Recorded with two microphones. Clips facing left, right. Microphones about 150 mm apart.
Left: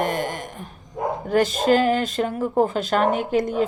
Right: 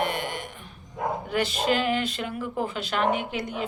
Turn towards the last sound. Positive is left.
turn(degrees=45)  # may be behind; listen again after turning